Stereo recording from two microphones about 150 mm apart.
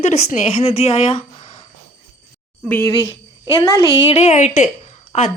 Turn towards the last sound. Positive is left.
turn(degrees=50)  # may be behind; listen again after turning